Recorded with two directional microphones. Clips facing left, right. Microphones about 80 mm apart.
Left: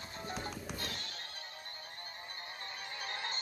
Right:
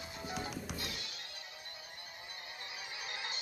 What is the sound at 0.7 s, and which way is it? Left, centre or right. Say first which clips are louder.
Music: left 1 dB; left.